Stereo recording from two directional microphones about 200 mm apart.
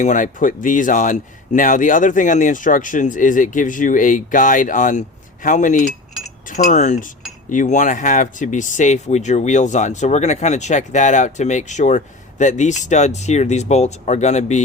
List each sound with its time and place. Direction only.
0.0 s speech: 40° left (ahead or behind)